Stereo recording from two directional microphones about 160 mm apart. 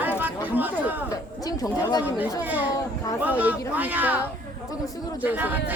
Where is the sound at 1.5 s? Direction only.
25° left (ahead or behind).